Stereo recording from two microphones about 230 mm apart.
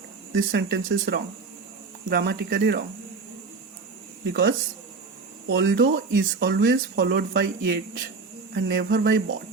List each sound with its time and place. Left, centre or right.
0.3 s speech: right
4.3 s speech: right